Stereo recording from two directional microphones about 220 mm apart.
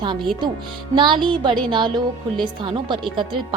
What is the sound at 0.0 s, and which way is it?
A woman's voice, 20° right (ahead or behind).